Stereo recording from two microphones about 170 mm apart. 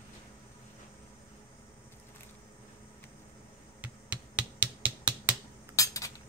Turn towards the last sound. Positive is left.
turn(degrees=20)  # may be behind; listen again after turning